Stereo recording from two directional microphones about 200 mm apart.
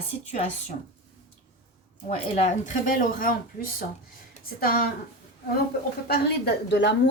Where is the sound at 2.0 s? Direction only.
30° left (ahead or behind).